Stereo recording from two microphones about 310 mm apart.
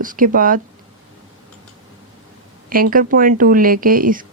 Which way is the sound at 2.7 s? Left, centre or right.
Right.